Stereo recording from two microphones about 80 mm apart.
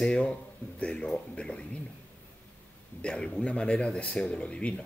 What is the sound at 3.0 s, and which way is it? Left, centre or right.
Speech, centre.